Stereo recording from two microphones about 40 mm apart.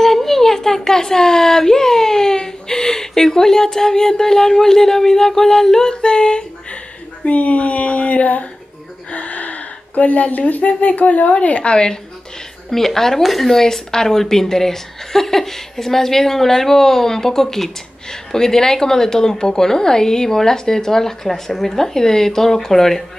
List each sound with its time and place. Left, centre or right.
0.0 s speech: centre; by 6.4 s left
7.2 s speech: left
12.6 s speech: centre